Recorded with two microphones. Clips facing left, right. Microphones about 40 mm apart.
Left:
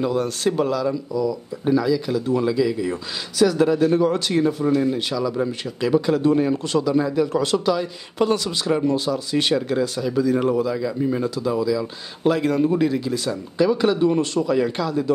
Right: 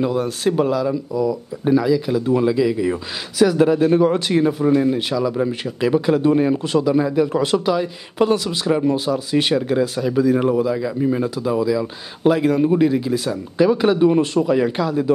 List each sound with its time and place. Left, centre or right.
0.0 s speech: centre